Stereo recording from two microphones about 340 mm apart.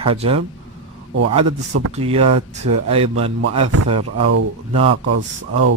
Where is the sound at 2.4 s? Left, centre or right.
Right.